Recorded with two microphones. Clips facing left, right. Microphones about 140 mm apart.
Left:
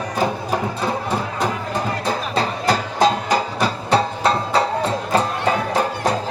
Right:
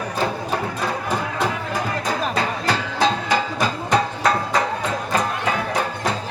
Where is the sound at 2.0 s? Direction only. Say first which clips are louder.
Left 1 dB; 35° left (ahead or behind).